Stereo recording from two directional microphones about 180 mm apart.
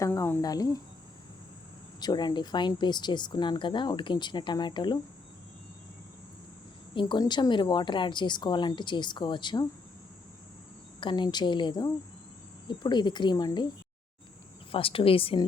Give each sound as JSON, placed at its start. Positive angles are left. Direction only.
{"t": 0.0, "sound": "speech", "side_deg": 15}
{"t": 2.0, "sound": "speech", "side_deg": 25}
{"t": 6.9, "sound": "speech", "side_deg": 25}
{"t": 11.0, "sound": "speech", "side_deg": 25}
{"t": 14.7, "sound": "a woman's voice", "side_deg": 30}